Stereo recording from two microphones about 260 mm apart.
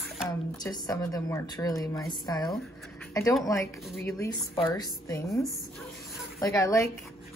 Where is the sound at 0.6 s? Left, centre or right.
Centre.